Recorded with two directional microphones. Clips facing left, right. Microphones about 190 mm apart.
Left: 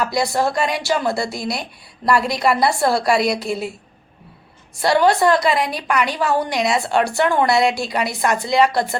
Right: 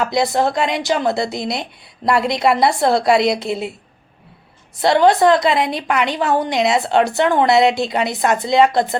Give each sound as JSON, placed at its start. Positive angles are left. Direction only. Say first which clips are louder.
{"t": 0.0, "sound": "a woman's voice", "louder": "right 2 dB", "side_deg": -20}
{"t": 4.8, "sound": "a woman's voice", "louder": "right 3 dB", "side_deg": -20}